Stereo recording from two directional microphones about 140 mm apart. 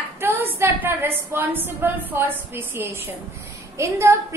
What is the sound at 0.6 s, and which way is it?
A woman's voice, 15° right (ahead or behind).